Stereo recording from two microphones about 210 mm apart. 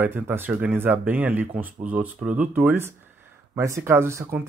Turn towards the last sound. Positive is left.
turn(degrees=-10)  # may be behind; listen again after turning